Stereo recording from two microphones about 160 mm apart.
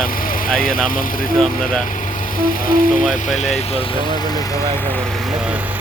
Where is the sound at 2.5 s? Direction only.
60° left (ahead or behind).